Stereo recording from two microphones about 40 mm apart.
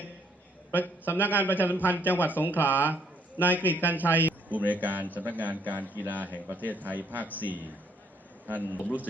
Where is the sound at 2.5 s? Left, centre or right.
Right.